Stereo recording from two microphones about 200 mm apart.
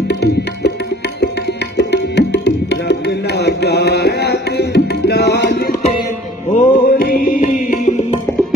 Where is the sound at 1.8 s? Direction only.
60° left (ahead or behind).